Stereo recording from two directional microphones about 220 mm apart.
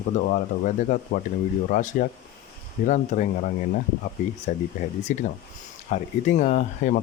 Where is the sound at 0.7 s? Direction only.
35° left (ahead or behind).